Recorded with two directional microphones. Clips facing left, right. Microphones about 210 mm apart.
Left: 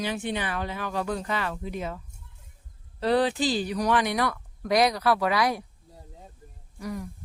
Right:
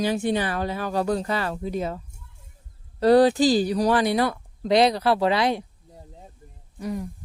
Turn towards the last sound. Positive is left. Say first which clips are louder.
# right 4 dB
turn(degrees=-25)  # may be behind; listen again after turning